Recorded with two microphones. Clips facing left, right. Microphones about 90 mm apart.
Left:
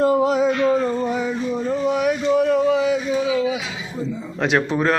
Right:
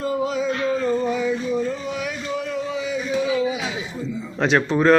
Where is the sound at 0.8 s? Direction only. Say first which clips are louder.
Even; 45° left (ahead or behind); by 3.0 s 65° left (ahead or behind).